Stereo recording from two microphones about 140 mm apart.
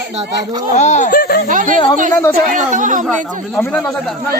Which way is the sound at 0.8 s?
60° left (ahead or behind).